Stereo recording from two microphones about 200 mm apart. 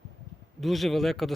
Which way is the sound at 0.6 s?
Centre (ahead or behind).